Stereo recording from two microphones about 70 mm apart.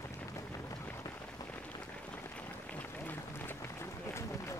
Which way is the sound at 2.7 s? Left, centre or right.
Left.